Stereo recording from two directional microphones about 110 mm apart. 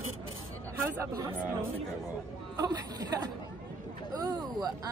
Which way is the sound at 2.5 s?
35° right (ahead or behind).